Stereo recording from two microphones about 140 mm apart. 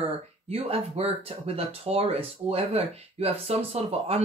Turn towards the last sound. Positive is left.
turn(degrees=-45)  # may be behind; listen again after turning